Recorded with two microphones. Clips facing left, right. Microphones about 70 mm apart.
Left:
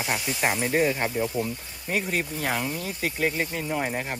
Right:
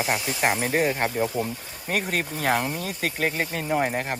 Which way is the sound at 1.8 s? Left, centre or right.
Right.